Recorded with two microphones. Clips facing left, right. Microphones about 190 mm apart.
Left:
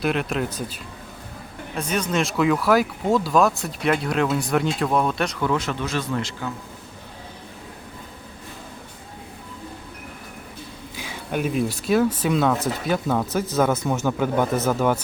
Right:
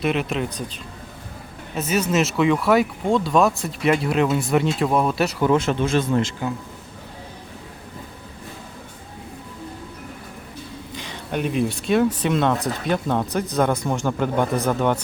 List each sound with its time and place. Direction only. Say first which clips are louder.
0.0 s speech: right 1 dB; centre (ahead or behind)
1.7 s speech: right 3 dB; 5° right (ahead or behind)
5.4 s speech: right 5 dB; 25° right (ahead or behind)
10.9 s speech: even; 5° left (ahead or behind)